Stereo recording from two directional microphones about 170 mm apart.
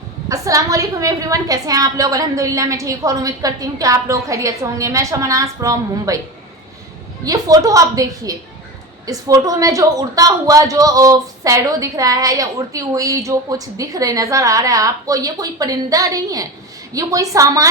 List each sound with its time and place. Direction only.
0.3 s a woman's voice: 20° right (ahead or behind)
7.3 s a woman's voice: 20° right (ahead or behind)